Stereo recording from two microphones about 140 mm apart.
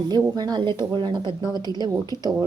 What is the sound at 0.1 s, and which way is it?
A woman's voice, 30° right (ahead or behind).